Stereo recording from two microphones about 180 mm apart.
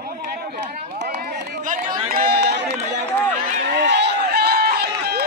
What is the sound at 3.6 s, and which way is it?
Run, 70° right (ahead or behind).